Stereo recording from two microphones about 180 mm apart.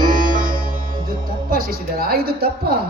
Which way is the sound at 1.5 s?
55° right (ahead or behind).